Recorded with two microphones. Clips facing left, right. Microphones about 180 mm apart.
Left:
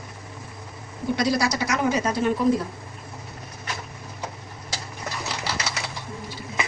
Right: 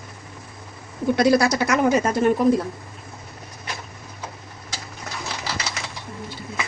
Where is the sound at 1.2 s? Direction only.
55° right (ahead or behind).